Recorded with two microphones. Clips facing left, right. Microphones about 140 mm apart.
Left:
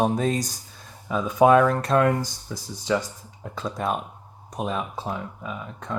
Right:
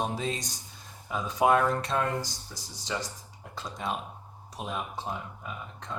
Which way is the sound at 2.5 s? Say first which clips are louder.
Left 11 dB; 90° left.